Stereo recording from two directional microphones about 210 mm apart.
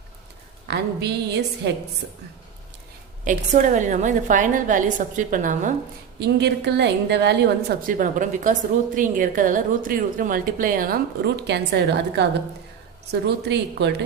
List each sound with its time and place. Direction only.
0.7 s a woman's voice: 55° right (ahead or behind)
3.2 s a woman's voice: 35° right (ahead or behind)
6.1 s a woman's voice: 50° right (ahead or behind)